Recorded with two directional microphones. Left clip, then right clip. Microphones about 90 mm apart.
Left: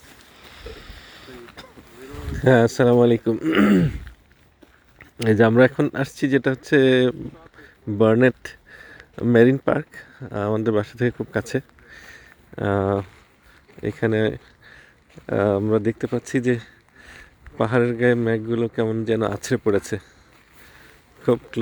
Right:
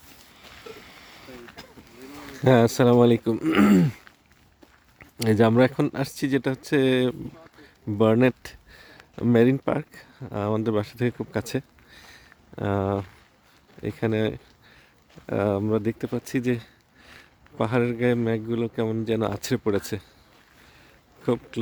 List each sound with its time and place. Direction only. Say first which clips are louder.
0.3 s boat: left 2 dB; 25° right (ahead or behind)
2.0 s speech: left 3 dB; 20° right (ahead or behind); by 4.0 s 35° right (ahead or behind)
5.2 s speech: left 4 dB; 15° right (ahead or behind)
21.2 s speech: left 6 dB; 5° right (ahead or behind)